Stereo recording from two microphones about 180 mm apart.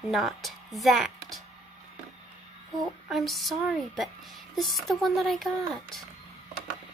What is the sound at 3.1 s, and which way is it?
Speech, centre (ahead or behind).